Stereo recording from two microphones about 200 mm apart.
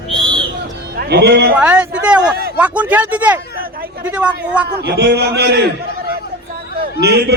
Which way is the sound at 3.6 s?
45° right (ahead or behind).